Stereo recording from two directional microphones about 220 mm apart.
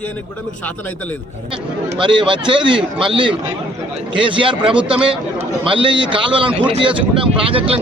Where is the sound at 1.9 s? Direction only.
20° right (ahead or behind).